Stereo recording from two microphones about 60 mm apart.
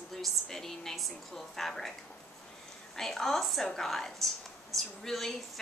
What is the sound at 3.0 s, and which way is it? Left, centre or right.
A woman's voice, centre.